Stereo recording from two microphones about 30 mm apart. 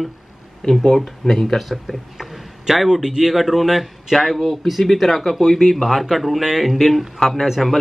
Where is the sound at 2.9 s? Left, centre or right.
Centre.